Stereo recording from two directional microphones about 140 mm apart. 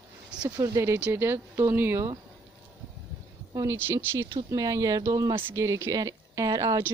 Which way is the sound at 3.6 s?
20° right (ahead or behind).